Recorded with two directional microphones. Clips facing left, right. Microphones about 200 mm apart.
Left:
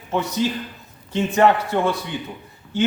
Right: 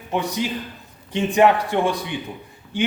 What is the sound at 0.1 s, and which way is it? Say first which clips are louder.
Speech: left 2 dB; 15° right (ahead or behind).